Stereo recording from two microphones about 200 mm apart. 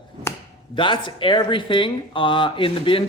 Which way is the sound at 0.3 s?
15° left (ahead or behind).